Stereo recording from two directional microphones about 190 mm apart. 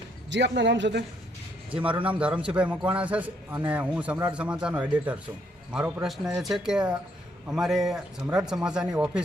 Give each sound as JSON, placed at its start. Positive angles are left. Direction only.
{"t": 0.3, "sound": "speech", "side_deg": -65}
{"t": 1.7, "sound": "a man's voice", "side_deg": -10}